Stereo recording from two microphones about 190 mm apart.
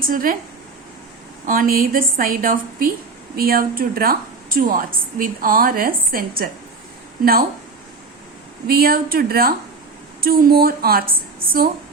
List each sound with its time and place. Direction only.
0.0 s a woman's voice: 45° right (ahead or behind)
1.5 s a woman's voice: 45° right (ahead or behind)
8.6 s a woman's voice: 50° right (ahead or behind)